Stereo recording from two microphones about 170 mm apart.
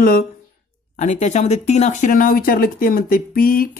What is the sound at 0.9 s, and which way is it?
Speech, 45° left (ahead or behind).